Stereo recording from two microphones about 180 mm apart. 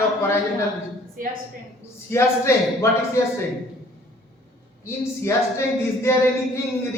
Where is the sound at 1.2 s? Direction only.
50° right (ahead or behind).